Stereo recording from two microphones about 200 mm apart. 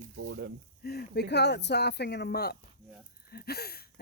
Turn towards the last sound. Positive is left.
turn(degrees=50)  # may be behind; listen again after turning